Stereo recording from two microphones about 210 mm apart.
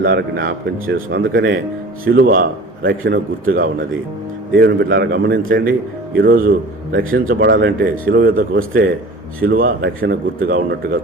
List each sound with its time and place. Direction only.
0.0 s a man's voice: 45° right (ahead or behind)